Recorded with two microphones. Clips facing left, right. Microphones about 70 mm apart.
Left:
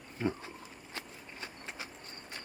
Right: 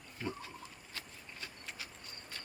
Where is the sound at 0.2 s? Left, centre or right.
Left.